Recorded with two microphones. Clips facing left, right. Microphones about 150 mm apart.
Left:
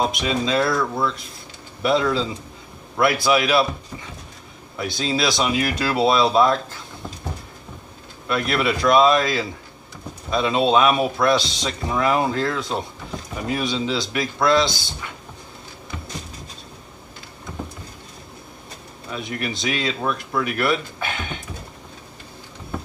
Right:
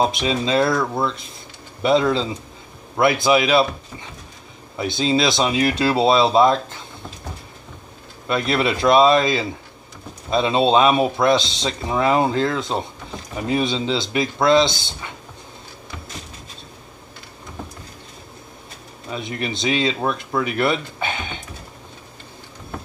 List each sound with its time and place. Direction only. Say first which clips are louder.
0.0 s speech: right 2 dB; 30° right (ahead or behind)
4.7 s speech: right 4 dB; 25° right (ahead or behind)
8.3 s speech: right 1 dB; 25° right (ahead or behind)
19.0 s speech: right 1 dB; 25° right (ahead or behind)